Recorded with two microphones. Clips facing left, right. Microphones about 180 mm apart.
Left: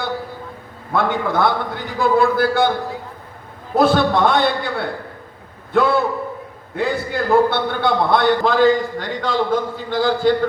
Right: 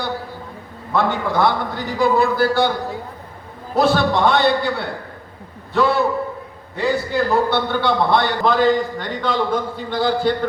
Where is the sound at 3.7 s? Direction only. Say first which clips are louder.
Left 1 dB; 50° left (ahead or behind).